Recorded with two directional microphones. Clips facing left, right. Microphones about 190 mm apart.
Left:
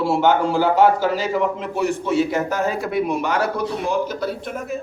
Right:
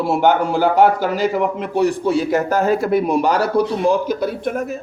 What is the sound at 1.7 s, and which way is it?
Speech, 35° right (ahead or behind).